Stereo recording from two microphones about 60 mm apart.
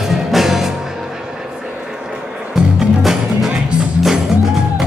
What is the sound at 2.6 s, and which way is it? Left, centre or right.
Music, centre.